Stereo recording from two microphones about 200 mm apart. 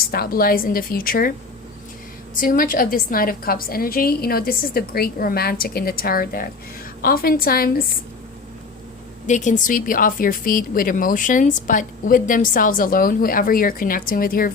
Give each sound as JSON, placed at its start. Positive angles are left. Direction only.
{"t": 0.0, "sound": "speech", "side_deg": 50}
{"t": 2.3, "sound": "speech", "side_deg": 45}
{"t": 9.2, "sound": "speech", "side_deg": 40}